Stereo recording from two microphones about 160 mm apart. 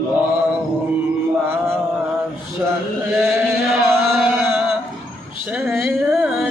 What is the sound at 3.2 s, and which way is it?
Chant, centre (ahead or behind).